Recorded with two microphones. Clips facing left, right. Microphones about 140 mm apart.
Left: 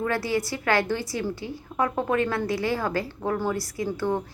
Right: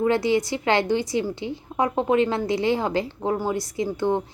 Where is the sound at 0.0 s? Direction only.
20° right (ahead or behind).